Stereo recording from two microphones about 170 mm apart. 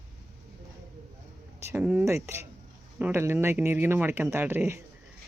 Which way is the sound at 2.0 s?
15° right (ahead or behind).